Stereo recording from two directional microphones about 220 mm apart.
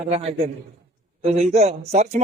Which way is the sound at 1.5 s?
30° right (ahead or behind).